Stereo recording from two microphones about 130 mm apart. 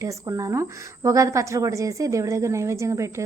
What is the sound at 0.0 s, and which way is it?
A woman's voice, 25° right (ahead or behind).